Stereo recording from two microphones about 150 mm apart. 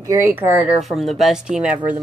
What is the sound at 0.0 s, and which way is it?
Speech, 20° right (ahead or behind).